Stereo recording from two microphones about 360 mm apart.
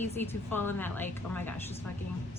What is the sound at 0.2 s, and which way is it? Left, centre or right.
A woman's voice, centre.